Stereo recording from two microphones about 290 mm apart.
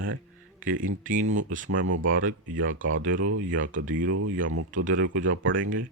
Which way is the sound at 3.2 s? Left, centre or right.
Right.